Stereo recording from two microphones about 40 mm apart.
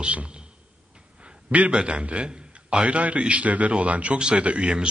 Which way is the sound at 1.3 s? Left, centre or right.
Right.